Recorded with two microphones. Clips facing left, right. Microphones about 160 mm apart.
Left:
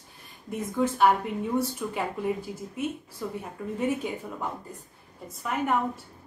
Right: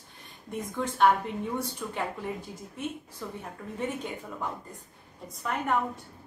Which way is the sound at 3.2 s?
10° left (ahead or behind).